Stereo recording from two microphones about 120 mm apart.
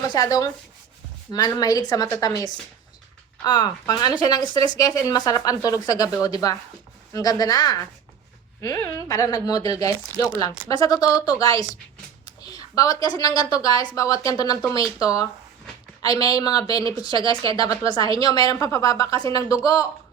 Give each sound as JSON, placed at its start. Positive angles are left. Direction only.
{"t": 0.1, "sound": "a woman's voice", "side_deg": 35}
{"t": 3.4, "sound": "a woman's voice", "side_deg": 35}